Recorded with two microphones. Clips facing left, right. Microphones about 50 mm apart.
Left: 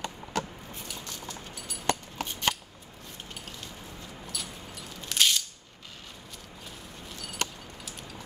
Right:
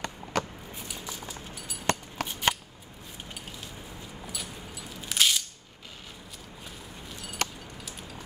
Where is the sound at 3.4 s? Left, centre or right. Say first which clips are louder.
Even; centre.